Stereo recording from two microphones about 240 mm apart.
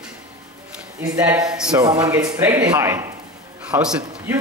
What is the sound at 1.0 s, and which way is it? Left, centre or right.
Speech, centre.